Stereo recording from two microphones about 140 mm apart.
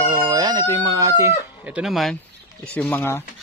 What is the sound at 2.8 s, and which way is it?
Speech, 15° left (ahead or behind).